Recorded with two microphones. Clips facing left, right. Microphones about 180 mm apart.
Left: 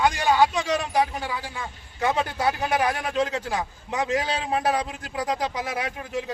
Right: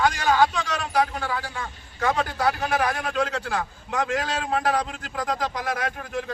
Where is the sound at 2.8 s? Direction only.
15° left (ahead or behind).